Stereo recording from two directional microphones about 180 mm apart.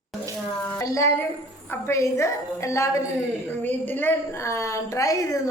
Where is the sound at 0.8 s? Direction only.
20° left (ahead or behind).